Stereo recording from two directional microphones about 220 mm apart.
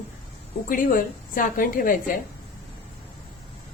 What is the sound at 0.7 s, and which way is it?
A woman's voice, 40° left (ahead or behind).